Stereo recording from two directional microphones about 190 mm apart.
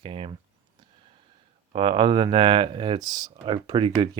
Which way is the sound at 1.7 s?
25° right (ahead or behind).